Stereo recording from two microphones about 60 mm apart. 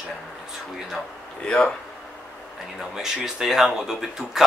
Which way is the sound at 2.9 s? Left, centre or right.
Centre.